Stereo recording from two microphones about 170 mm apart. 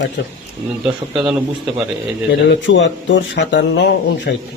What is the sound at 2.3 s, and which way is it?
Speech, 90° left.